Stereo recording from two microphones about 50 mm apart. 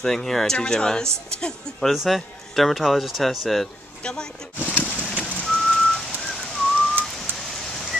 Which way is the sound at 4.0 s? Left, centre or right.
Centre.